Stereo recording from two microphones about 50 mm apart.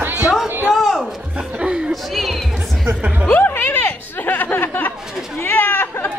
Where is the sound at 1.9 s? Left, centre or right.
Centre.